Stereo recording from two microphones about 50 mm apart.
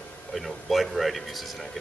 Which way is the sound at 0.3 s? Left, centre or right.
Centre.